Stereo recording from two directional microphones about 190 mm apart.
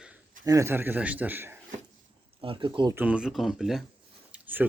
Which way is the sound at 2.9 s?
10° right (ahead or behind).